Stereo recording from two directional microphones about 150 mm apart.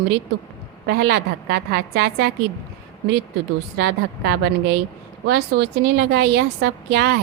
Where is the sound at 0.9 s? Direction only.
90° right.